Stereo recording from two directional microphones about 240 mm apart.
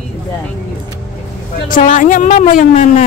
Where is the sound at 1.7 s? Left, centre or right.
Left.